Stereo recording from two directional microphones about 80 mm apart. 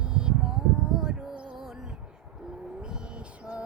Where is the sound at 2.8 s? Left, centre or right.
Centre.